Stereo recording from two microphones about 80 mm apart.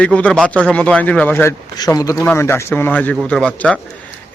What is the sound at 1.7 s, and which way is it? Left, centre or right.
Speech, left.